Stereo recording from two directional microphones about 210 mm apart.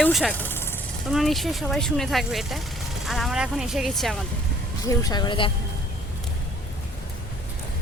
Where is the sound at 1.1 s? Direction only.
Centre (ahead or behind).